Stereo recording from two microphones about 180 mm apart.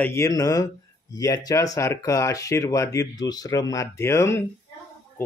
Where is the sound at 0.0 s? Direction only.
15° left (ahead or behind).